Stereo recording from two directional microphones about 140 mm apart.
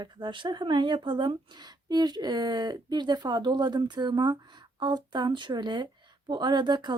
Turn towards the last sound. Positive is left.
turn(degrees=-30)  # may be behind; listen again after turning